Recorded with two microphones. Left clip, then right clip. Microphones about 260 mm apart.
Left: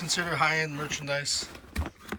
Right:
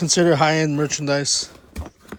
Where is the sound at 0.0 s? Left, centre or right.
Centre.